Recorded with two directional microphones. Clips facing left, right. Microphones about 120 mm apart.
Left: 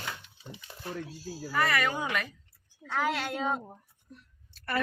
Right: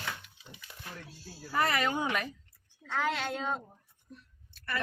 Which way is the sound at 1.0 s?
90° left.